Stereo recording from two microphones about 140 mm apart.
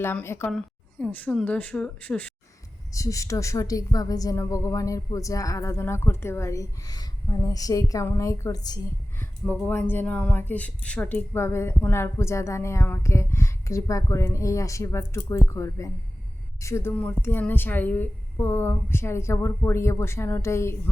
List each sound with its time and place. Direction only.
0.0 s a woman's voice: 15° left (ahead or behind)
2.9 s speech: 25° left (ahead or behind)
9.1 s a woman's voice: 15° left (ahead or behind)